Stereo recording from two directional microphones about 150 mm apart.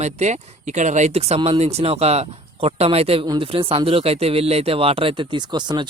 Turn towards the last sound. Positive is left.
turn(degrees=-30)  # may be behind; listen again after turning